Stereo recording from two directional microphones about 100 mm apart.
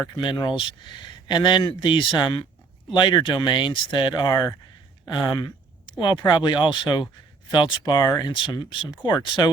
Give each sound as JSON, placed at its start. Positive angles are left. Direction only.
{"t": 0.2, "sound": "speech", "side_deg": 55}
{"t": 2.9, "sound": "speech", "side_deg": 45}
{"t": 8.4, "sound": "speech", "side_deg": 55}